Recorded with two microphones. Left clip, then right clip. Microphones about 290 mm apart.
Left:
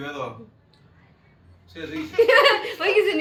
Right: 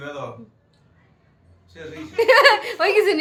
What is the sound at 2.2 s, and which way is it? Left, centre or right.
Speech, centre.